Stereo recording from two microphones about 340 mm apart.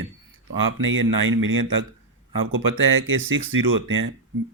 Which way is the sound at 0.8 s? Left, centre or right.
Right.